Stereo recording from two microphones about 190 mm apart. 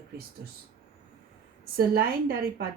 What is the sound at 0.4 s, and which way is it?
Speech, 55° right (ahead or behind).